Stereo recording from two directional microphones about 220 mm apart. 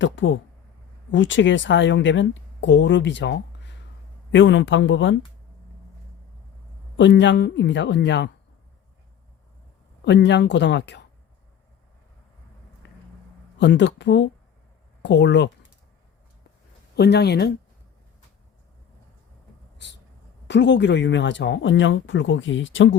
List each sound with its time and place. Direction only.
0.0 s speech: 60° left (ahead or behind)
6.9 s speech: 55° left (ahead or behind)
10.0 s speech: 55° left (ahead or behind)
12.8 s a sound: 55° left (ahead or behind)
13.6 s speech: 55° left (ahead or behind)
16.9 s speech: 50° left (ahead or behind)
20.5 s speech: 55° left (ahead or behind)